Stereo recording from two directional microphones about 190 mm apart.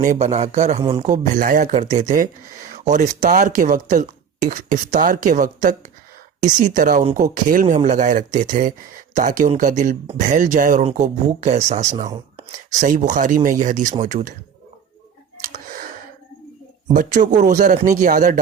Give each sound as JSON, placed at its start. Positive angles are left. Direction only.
{"t": 0.0, "sound": "speech", "side_deg": -40}
{"t": 0.8, "sound": "a man's voice", "side_deg": -25}
{"t": 1.0, "sound": "speech", "side_deg": -40}
{"t": 15.4, "sound": "clicking", "side_deg": -50}
{"t": 16.9, "sound": "speech", "side_deg": -40}